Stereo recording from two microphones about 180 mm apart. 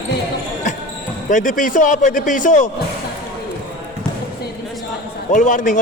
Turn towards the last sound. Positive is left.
turn(degrees=45)  # may be behind; listen again after turning